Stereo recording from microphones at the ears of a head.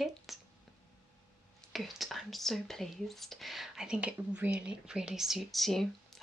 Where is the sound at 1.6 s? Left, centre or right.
Centre.